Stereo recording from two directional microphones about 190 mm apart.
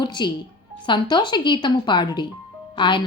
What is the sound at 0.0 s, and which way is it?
Music, 25° left (ahead or behind).